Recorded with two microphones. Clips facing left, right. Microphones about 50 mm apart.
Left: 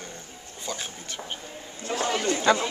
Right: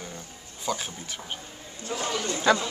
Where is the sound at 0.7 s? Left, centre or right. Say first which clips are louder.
Right 4 dB; centre.